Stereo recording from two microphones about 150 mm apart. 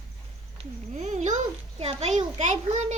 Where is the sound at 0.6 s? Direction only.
50° right (ahead or behind).